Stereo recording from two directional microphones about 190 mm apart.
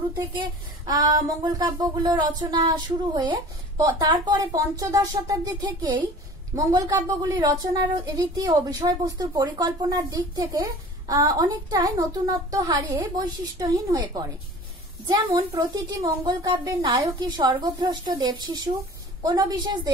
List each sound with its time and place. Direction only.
0.4 s a woman's voice: 20° right (ahead or behind)